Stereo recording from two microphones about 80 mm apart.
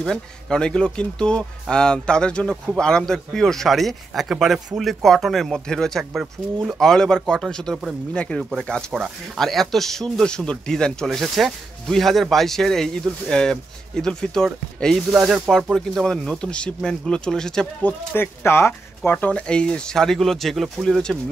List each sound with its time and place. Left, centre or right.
0.0 s speech: centre
8.4 s speech: centre
15.1 s speech: centre
15.5 s speech: centre
17.8 s speech: left; by 21.2 s centre